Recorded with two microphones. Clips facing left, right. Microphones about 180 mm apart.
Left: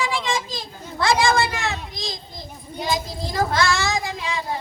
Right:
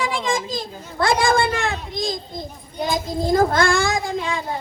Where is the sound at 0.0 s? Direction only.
50° right (ahead or behind).